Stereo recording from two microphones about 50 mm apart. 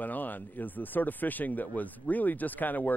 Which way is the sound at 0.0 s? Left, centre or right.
Left.